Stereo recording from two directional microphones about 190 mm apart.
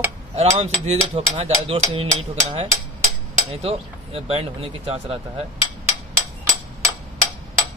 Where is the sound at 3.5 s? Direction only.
30° right (ahead or behind).